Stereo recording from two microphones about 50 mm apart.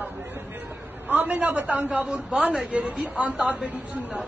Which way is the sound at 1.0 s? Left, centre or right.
Right.